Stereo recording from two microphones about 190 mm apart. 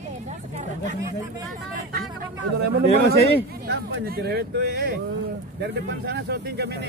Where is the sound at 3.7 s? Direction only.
55° right (ahead or behind).